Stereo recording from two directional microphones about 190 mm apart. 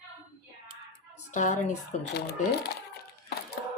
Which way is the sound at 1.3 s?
40° left (ahead or behind).